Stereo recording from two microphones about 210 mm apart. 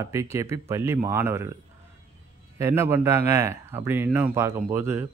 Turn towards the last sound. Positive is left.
turn(degrees=-10)  # may be behind; listen again after turning